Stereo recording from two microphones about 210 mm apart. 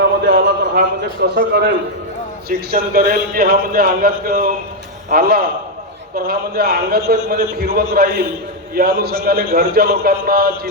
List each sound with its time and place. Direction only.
0.0 s a man's voice: 55° right (ahead or behind)